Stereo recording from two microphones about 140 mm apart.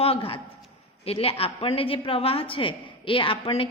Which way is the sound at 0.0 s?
45° left (ahead or behind).